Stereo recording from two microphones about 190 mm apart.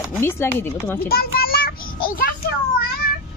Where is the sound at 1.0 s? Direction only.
55° left (ahead or behind).